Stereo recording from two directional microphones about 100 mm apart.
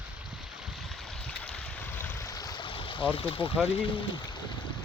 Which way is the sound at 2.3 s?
35° left (ahead or behind).